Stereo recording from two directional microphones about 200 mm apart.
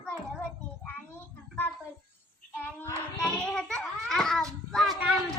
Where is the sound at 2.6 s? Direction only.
10° left (ahead or behind).